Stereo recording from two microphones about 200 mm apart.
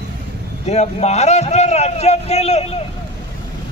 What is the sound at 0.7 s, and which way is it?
Speech, 35° left (ahead or behind).